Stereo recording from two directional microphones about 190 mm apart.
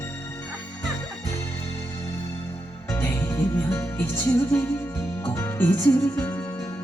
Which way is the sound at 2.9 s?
15° left (ahead or behind).